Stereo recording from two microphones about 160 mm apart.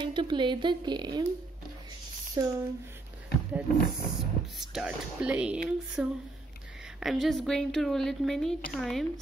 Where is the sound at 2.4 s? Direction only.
20° right (ahead or behind).